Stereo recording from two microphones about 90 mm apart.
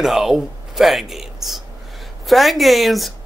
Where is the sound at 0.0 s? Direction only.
5° right (ahead or behind).